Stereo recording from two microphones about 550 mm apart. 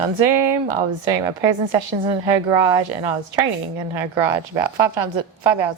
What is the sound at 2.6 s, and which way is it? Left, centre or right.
A woman's voice, right.